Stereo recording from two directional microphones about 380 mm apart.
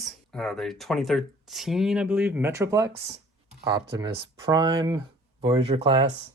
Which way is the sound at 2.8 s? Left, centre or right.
Right.